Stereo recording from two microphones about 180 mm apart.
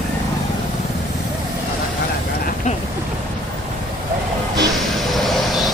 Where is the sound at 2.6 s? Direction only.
40° left (ahead or behind).